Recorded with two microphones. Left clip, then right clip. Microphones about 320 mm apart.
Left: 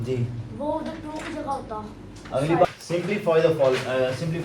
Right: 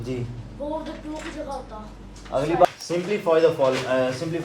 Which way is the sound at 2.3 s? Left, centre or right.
Centre.